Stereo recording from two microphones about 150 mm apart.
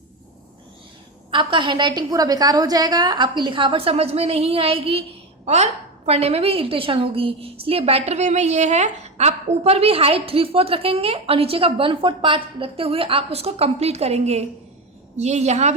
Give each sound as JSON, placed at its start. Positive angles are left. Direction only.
{"t": 1.3, "sound": "a woman's voice", "side_deg": -35}